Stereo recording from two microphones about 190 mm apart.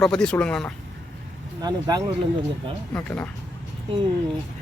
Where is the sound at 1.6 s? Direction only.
20° right (ahead or behind).